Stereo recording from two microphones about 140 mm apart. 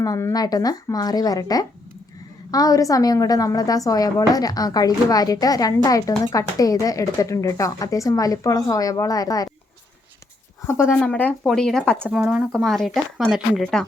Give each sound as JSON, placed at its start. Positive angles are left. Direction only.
{"t": 0.0, "sound": "a woman's voice", "side_deg": 25}
{"t": 11.0, "sound": "speech", "side_deg": 10}